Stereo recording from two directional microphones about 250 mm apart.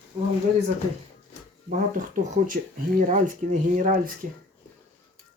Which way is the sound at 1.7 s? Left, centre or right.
Right.